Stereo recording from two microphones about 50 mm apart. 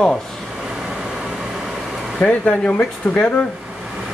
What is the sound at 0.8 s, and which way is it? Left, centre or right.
Vehicle, centre.